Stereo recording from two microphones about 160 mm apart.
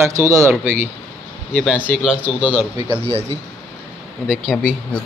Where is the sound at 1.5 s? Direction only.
Centre (ahead or behind).